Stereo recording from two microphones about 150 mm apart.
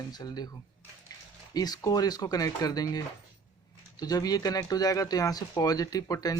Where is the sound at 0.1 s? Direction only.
25° left (ahead or behind).